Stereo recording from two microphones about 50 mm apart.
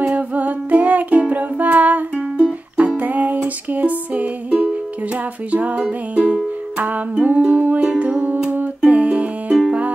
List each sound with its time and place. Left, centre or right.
0.0 s music: right